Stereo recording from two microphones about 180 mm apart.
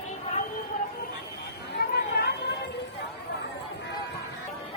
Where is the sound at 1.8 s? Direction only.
65° left (ahead or behind).